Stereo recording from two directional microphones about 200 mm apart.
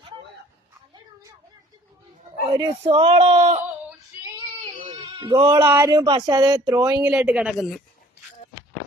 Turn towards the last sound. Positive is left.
turn(degrees=0)  # may be behind; listen again after turning